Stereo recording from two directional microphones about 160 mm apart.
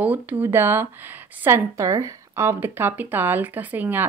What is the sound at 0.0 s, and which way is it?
Speech, 10° right (ahead or behind).